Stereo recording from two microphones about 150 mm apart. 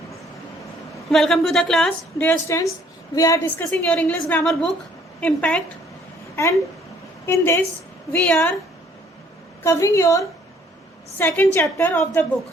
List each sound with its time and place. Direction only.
1.1 s a woman's voice: centre (ahead or behind)
3.2 s a woman's voice: 25° left (ahead or behind)
3.4 s a woman's voice: 10° left (ahead or behind)
7.3 s a woman's voice: 15° left (ahead or behind)
9.6 s a woman's voice: 20° left (ahead or behind)